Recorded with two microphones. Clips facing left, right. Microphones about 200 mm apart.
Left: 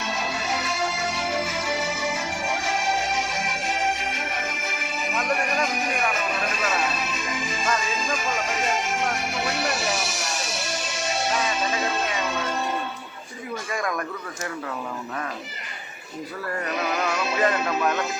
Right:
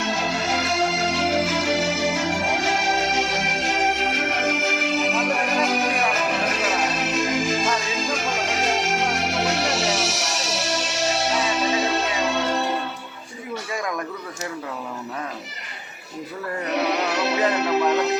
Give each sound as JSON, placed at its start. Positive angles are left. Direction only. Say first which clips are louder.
{"t": 0.0, "sound": "music", "louder": "right 4 dB", "side_deg": -80}
{"t": 16.7, "sound": "music", "louder": "right 4 dB", "side_deg": -70}